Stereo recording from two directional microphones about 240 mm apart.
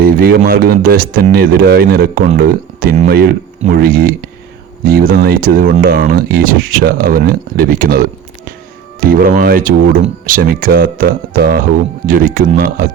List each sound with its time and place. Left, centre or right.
0.0 s speech: right